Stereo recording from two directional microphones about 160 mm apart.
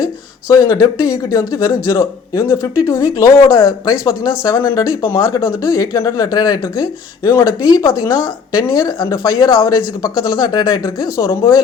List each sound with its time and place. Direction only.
0.0 s speech: 20° left (ahead or behind)